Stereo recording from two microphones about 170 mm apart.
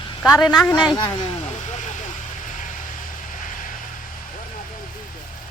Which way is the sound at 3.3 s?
50° left (ahead or behind).